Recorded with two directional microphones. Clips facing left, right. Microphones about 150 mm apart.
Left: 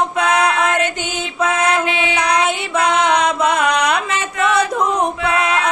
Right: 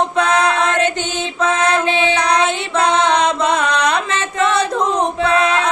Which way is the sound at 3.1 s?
25° right (ahead or behind).